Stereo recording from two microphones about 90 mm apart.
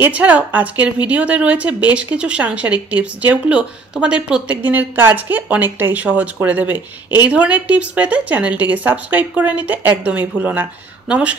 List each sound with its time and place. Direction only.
0.0 s a woman's voice: 15° right (ahead or behind)